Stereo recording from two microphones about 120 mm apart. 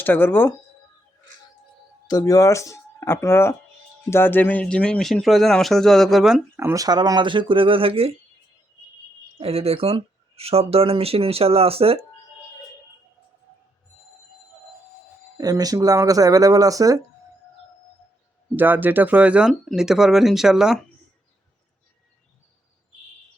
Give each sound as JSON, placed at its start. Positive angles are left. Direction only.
{"t": 0.0, "sound": "speech", "side_deg": 15}
{"t": 2.0, "sound": "speech", "side_deg": 35}
{"t": 6.6, "sound": "speech", "side_deg": -25}
{"t": 9.4, "sound": "speech", "side_deg": -55}
{"t": 15.4, "sound": "speech", "side_deg": -30}
{"t": 18.5, "sound": "speech", "side_deg": -15}